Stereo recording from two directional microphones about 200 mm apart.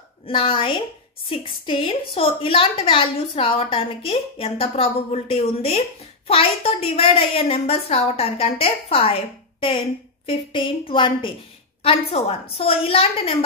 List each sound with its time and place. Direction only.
0.3 s a woman's voice: 25° left (ahead or behind)